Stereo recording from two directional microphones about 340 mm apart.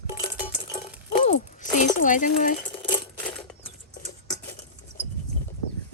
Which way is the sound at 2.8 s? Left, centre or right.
Centre.